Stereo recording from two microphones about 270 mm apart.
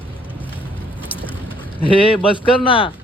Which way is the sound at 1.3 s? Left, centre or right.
Centre.